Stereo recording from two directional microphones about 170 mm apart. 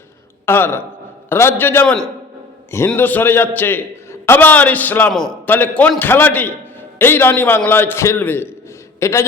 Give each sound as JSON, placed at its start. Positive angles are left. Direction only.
{"t": 0.4, "sound": "a man's voice", "side_deg": 15}